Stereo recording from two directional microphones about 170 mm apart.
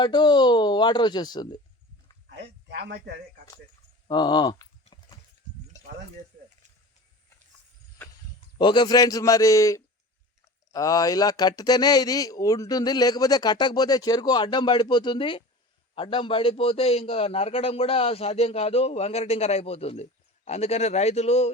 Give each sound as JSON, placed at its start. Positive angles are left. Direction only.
{"t": 0.0, "sound": "speech", "side_deg": 25}
{"t": 2.3, "sound": "speech", "side_deg": -80}
{"t": 4.1, "sound": "speech", "side_deg": 25}
{"t": 4.9, "sound": "clip-clop", "side_deg": 30}
{"t": 8.5, "sound": "a man's voice", "side_deg": 25}